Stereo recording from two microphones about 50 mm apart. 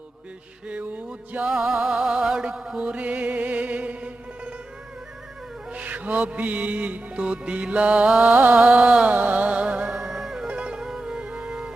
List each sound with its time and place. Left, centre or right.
0.7 s music: right
5.7 s music: right
8.2 s music: right
9.9 s music: centre
10.4 s music: right